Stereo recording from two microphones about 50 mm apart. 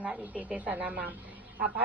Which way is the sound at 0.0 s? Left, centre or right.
Right.